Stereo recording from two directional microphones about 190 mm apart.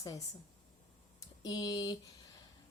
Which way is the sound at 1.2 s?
20° left (ahead or behind).